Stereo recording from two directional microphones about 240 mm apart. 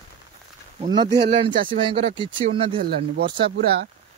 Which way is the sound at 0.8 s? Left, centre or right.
Centre.